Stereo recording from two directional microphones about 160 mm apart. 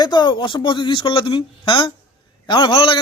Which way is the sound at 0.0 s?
25° left (ahead or behind).